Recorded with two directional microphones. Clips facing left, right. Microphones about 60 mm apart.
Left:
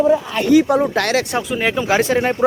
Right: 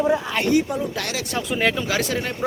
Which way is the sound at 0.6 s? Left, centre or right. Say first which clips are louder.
Left 10 dB; left.